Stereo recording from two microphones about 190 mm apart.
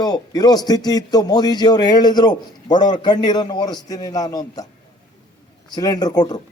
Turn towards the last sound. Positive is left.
turn(degrees=20)  # may be behind; listen again after turning